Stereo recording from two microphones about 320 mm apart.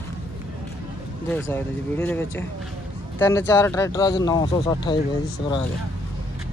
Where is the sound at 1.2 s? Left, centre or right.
Centre.